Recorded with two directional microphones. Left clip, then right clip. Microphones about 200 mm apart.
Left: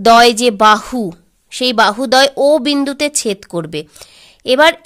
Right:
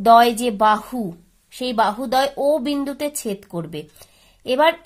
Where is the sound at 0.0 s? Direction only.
40° left (ahead or behind).